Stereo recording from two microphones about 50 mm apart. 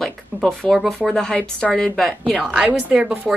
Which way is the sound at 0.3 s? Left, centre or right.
Right.